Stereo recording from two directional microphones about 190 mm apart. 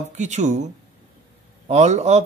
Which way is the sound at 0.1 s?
40° right (ahead or behind).